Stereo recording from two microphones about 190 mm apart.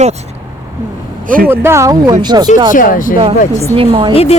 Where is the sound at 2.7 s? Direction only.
45° left (ahead or behind).